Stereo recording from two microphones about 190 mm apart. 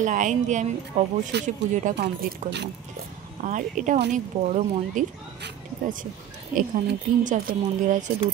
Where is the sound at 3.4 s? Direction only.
40° right (ahead or behind).